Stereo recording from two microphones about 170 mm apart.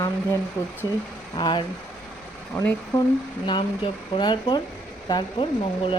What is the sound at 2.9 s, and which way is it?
Speech, 10° left (ahead or behind).